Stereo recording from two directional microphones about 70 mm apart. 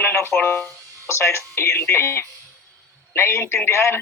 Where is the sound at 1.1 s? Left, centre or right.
Left.